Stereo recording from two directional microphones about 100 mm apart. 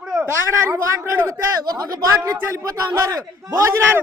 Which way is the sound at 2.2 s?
35° right (ahead or behind).